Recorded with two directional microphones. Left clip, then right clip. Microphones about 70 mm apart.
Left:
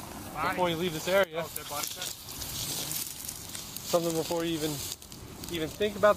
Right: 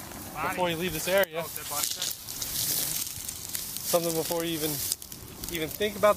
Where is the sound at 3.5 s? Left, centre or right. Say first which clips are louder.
Right 1 dB; right.